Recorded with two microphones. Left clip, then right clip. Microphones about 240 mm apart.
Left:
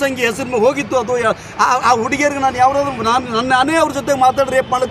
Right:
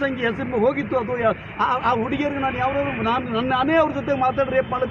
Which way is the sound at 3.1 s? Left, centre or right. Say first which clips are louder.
Left 9 dB; left.